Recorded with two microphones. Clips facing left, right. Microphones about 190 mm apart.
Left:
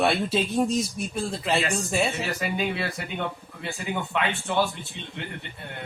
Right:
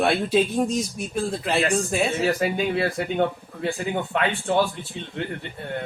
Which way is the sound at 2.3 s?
50° right (ahead or behind).